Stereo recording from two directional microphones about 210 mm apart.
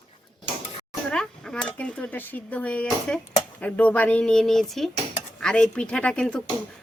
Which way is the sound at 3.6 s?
5° left (ahead or behind).